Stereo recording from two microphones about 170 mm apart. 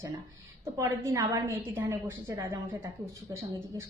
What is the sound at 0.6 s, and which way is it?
A woman's voice, 20° right (ahead or behind).